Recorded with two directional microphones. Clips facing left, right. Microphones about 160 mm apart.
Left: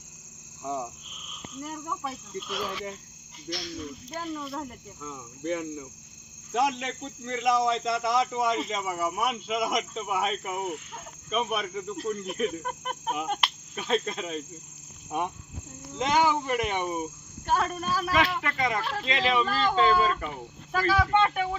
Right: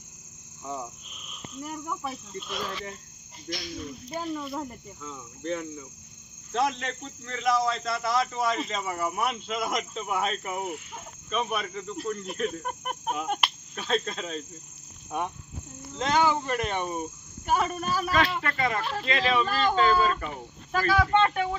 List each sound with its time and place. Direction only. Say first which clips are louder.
0.6 s cricket: left 3 dB; 15° left (ahead or behind)
1.1 s speech: even; centre (ahead or behind)
3.5 s cricket: even; 15° right (ahead or behind)
4.1 s speech: right 3 dB; 5° right (ahead or behind); by 12.6 s 15° left (ahead or behind)
12.6 s cricket: even; 5° right (ahead or behind)
13.2 s speech: right 1 dB; 5° right (ahead or behind)
13.7 s speech: left 1 dB; 15° left (ahead or behind)
16.0 s speech: even; 15° left (ahead or behind)
17.4 s speech: right 1 dB; 10° right (ahead or behind)
18.1 s speech: even; 15° left (ahead or behind)
19.5 s cricket: right 1 dB; 10° right (ahead or behind)
19.7 s speech: left 1 dB; 15° left (ahead or behind)